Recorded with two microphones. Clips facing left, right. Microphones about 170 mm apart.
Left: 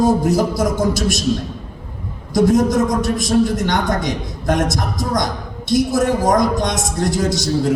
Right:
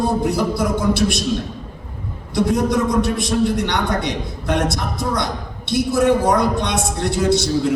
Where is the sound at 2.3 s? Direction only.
40° left (ahead or behind).